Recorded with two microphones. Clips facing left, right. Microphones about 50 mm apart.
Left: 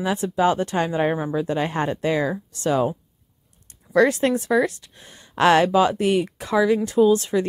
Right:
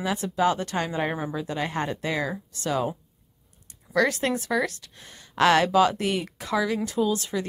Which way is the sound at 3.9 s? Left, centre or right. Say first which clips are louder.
Left 6 dB; left.